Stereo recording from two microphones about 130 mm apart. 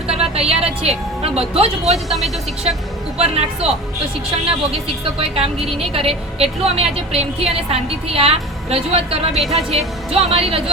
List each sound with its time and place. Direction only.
0.1 s speech: 50° right (ahead or behind)
3.2 s a woman's voice: 50° right (ahead or behind)
5.2 s a woman's voice: 45° right (ahead or behind)